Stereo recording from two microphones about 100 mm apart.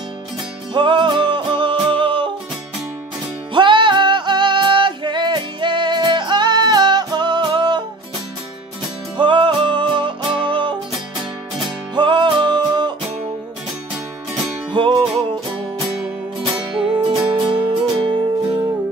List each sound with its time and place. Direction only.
0.7 s music: 55° right (ahead or behind)
3.5 s music: 55° right (ahead or behind)
9.1 s music: 55° right (ahead or behind)
14.7 s music: 60° right (ahead or behind)
17.1 s music: 55° right (ahead or behind)